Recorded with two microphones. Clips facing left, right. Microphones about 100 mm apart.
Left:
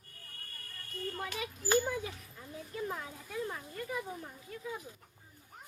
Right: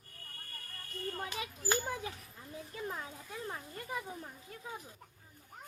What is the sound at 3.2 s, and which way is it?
Speech, 30° right (ahead or behind).